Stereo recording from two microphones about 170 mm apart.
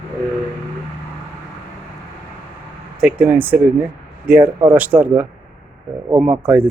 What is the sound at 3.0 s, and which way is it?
A man's voice, 5° right (ahead or behind).